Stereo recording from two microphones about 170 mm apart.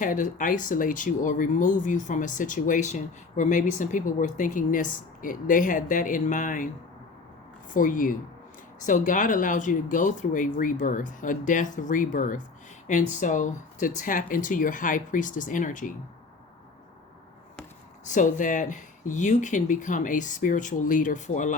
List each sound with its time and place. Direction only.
0.0 s speech: 50° left (ahead or behind)
7.7 s speech: 50° left (ahead or behind)
18.1 s speech: 50° left (ahead or behind)